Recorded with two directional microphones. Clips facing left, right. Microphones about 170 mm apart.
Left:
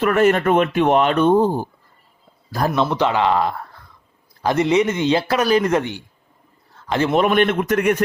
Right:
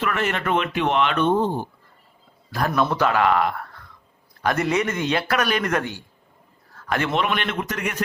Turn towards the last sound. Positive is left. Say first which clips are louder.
# left 10 dB
turn(degrees=55)  # may be behind; listen again after turning